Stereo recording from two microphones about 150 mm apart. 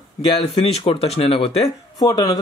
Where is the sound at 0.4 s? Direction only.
40° left (ahead or behind).